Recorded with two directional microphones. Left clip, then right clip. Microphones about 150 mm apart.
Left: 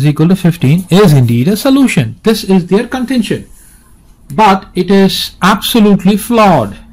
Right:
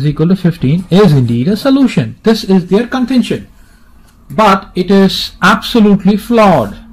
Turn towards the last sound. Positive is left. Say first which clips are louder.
# even
turn(degrees=25)  # may be behind; listen again after turning